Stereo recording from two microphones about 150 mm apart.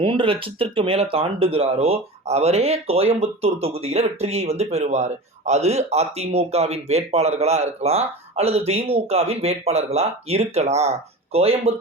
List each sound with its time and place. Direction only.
0.0 s speech: 35° right (ahead or behind)